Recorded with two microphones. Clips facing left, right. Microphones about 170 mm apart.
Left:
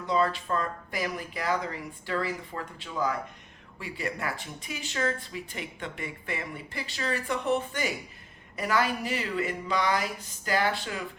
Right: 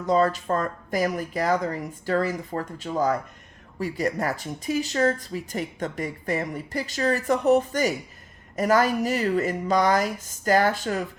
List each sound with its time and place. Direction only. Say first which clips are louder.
0.0 s speech: right 5 dB; 45° right (ahead or behind)